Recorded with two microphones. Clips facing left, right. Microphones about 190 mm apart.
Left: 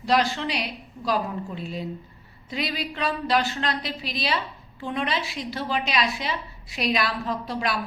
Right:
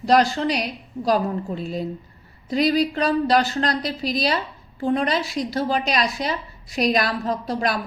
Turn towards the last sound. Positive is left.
turn(degrees=-40)  # may be behind; listen again after turning